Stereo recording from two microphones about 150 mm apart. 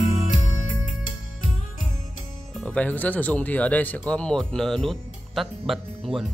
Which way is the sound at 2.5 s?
5° left (ahead or behind).